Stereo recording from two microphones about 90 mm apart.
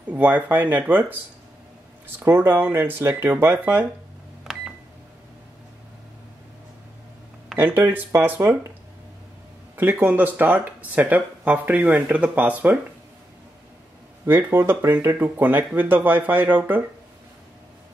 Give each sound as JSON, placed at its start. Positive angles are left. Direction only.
{"t": 0.1, "sound": "speech", "side_deg": -15}
{"t": 2.1, "sound": "speech", "side_deg": -25}
{"t": 4.5, "sound": "a sound", "side_deg": -5}
{"t": 7.5, "sound": "speech", "side_deg": -25}
{"t": 9.8, "sound": "speech", "side_deg": -20}
{"t": 14.2, "sound": "speech", "side_deg": -25}